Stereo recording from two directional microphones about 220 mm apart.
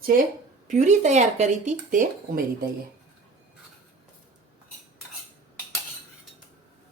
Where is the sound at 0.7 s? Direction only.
35° right (ahead or behind).